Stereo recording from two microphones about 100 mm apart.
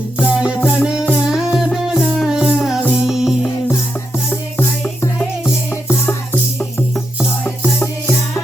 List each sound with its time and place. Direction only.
0.2 s music: 10° right (ahead or behind)
4.3 s music: 25° left (ahead or behind)
5.9 s music: 15° left (ahead or behind)